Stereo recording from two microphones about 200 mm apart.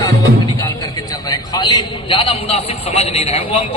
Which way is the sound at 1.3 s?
20° left (ahead or behind).